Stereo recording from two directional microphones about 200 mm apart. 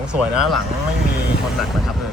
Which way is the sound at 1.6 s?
Centre (ahead or behind).